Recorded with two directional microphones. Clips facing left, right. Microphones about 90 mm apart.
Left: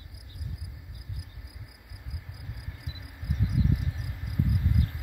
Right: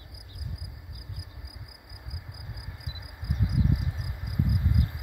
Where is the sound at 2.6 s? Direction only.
15° right (ahead or behind).